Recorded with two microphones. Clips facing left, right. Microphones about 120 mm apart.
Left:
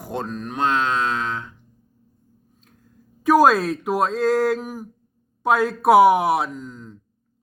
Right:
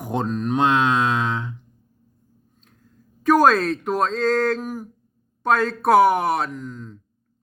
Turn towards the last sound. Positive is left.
turn(degrees=10)  # may be behind; listen again after turning